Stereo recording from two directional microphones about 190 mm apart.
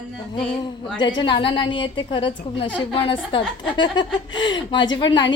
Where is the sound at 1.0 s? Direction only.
25° left (ahead or behind).